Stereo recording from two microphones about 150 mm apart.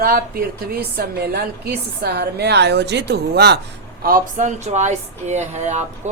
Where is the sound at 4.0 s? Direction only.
70° right (ahead or behind).